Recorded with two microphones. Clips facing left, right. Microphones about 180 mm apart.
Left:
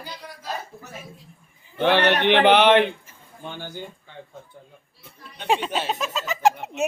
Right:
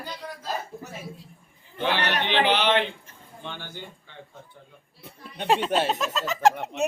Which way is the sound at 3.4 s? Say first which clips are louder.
Left 4 dB; 45° left (ahead or behind).